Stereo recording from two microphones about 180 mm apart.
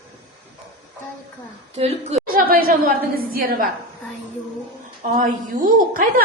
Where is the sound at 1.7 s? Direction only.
35° right (ahead or behind).